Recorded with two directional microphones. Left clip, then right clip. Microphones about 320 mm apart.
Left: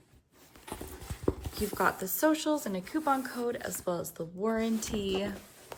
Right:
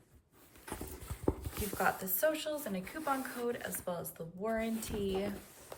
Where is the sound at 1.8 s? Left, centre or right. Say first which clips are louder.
Left 4 dB; centre.